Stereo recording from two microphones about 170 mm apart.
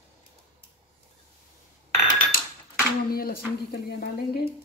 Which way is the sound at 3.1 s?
65° left (ahead or behind).